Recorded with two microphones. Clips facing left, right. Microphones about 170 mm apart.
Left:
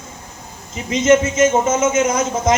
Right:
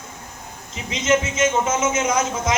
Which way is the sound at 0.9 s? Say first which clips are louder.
Left 7 dB; 45° left (ahead or behind).